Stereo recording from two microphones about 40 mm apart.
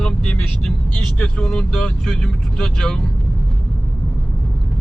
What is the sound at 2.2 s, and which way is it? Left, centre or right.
Speech, centre.